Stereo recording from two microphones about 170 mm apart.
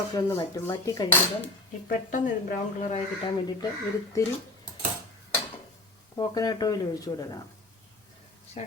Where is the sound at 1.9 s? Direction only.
50° left (ahead or behind).